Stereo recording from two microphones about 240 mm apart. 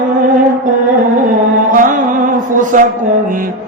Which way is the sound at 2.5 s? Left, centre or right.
Right.